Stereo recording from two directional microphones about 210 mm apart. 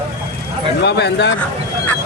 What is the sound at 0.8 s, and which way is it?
Bow-wow, 55° left (ahead or behind).